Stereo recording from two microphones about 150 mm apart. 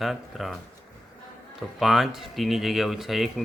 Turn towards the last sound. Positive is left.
turn(degrees=0)  # may be behind; listen again after turning